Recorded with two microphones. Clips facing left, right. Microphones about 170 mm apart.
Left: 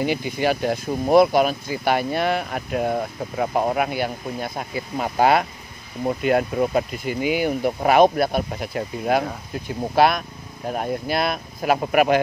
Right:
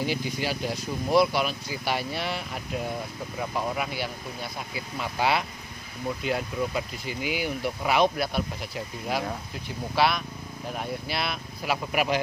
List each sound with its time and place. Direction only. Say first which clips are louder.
0.0 s speech: left 7 dB; 60° left (ahead or behind)